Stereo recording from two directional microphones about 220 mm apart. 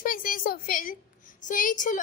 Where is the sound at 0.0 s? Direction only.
40° left (ahead or behind).